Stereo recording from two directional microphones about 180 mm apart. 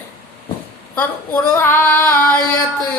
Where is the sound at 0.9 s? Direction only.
10° left (ahead or behind).